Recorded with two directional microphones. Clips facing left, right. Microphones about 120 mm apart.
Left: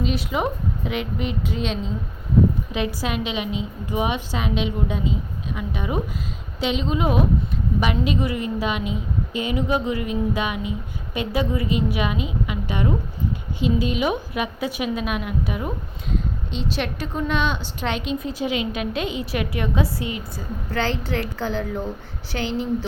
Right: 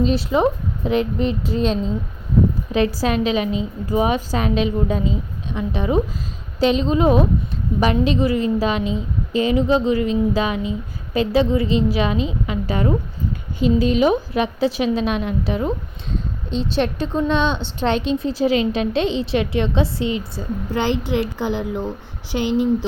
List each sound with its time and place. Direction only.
0.0 s a woman's voice: 30° right (ahead or behind)
3.0 s a woman's voice: 40° right (ahead or behind)
5.5 s a woman's voice: 30° right (ahead or behind)